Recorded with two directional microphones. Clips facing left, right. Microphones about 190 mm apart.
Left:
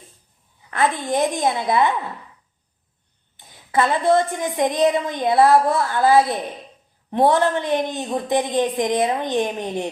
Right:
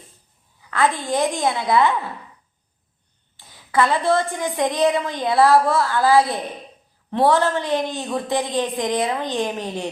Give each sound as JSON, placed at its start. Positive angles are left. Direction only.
{"t": 0.7, "sound": "a woman's voice", "side_deg": 20}
{"t": 3.3, "sound": "a woman's voice", "side_deg": 20}